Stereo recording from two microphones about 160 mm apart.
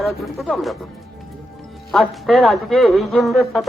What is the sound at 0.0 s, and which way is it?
Speech, centre (ahead or behind).